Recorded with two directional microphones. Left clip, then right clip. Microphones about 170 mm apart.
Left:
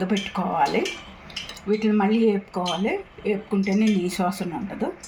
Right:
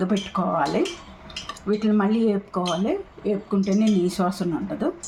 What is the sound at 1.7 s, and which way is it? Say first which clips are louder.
Speech: left 1 dB; 75° right (ahead or behind).